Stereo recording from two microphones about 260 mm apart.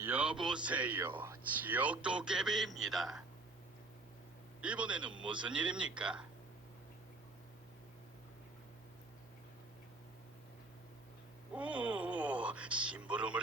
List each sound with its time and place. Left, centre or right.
0.0 s speech: centre
4.6 s speech: centre
5.2 s speech: centre
5.5 s speech: centre
11.5 s speech: centre